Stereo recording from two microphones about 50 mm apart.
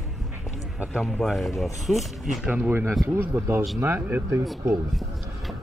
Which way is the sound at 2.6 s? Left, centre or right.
Right.